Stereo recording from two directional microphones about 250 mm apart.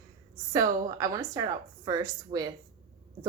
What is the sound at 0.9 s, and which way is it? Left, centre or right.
A woman's voice, centre.